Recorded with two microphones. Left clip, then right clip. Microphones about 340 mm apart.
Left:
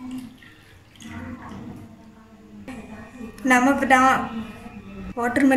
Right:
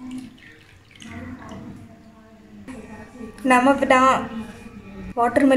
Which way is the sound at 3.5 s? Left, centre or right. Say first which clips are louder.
Right 1 dB; centre.